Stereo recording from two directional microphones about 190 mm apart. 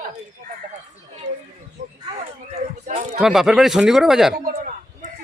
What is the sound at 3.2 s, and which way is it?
Speech, centre (ahead or behind).